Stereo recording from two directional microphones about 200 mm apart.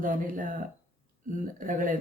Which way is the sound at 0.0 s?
40° right (ahead or behind).